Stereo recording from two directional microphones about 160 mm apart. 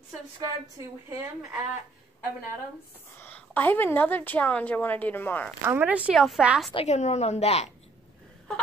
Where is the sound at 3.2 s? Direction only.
10° left (ahead or behind).